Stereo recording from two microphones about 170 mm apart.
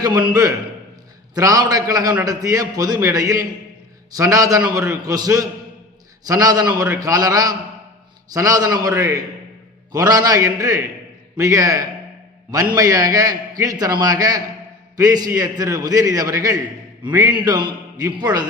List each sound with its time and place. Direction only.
0.0 s a man's voice: 20° right (ahead or behind)